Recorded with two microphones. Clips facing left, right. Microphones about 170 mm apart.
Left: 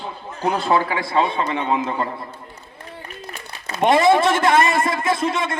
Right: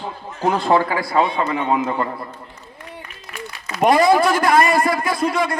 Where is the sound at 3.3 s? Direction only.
30° left (ahead or behind).